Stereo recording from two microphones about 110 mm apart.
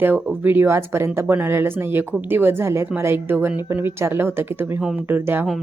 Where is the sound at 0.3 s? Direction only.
20° right (ahead or behind).